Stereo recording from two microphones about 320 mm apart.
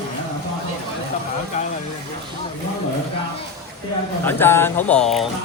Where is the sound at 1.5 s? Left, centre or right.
Left.